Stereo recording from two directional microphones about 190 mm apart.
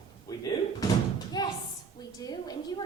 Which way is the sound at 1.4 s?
20° left (ahead or behind).